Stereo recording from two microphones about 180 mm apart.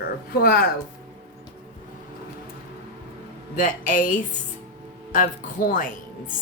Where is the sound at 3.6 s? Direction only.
45° left (ahead or behind).